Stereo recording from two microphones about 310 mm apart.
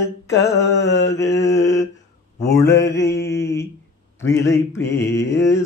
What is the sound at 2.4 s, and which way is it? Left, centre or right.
Speech, centre.